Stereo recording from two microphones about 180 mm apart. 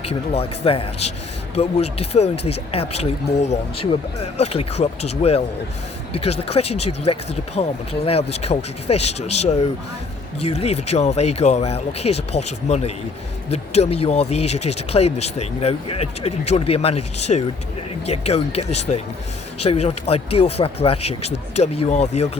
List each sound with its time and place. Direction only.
0.0 s speech: 35° left (ahead or behind)